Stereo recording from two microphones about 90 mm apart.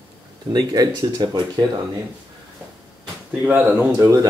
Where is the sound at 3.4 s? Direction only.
20° right (ahead or behind).